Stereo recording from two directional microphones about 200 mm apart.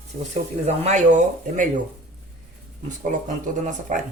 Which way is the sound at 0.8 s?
35° right (ahead or behind).